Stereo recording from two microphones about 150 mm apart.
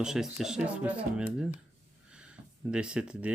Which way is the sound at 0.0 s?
5° right (ahead or behind).